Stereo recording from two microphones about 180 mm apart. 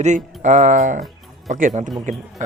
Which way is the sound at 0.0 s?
40° right (ahead or behind).